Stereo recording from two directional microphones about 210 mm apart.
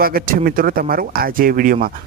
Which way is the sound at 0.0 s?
45° right (ahead or behind).